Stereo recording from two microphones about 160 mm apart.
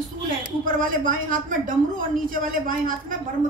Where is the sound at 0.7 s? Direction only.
55° right (ahead or behind).